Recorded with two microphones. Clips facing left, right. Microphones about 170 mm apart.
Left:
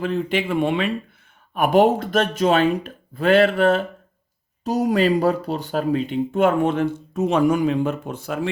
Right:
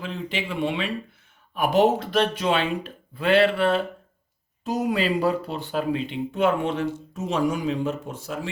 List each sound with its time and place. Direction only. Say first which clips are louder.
0.0 s speech: left 8 dB; 55° left (ahead or behind)